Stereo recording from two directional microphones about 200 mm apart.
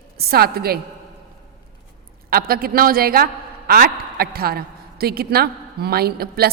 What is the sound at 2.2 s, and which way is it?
A man's voice, 50° right (ahead or behind).